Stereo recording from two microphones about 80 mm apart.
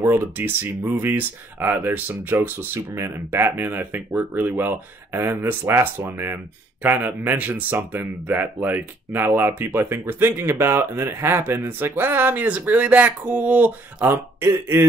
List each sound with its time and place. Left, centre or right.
0.0 s speech: right